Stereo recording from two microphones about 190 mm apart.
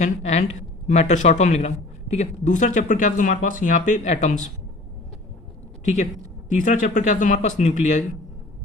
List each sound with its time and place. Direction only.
0.0 s a man's voice: 35° left (ahead or behind)
5.8 s a man's voice: 40° left (ahead or behind)